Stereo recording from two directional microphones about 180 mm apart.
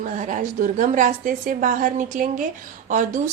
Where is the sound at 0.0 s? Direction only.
45° right (ahead or behind).